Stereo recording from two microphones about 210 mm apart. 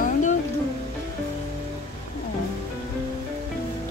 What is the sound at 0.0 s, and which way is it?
Music, 35° left (ahead or behind).